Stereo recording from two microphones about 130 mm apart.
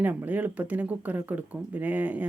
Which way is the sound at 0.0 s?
15° right (ahead or behind).